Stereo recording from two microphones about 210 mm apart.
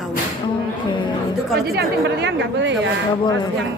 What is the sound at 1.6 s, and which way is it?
A woman's voice, 50° right (ahead or behind).